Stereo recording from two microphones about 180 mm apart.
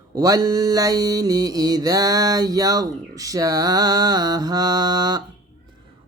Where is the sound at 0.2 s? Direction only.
20° right (ahead or behind).